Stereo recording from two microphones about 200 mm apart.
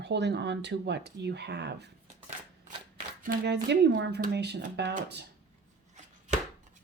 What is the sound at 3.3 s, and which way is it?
Speech, 55° right (ahead or behind).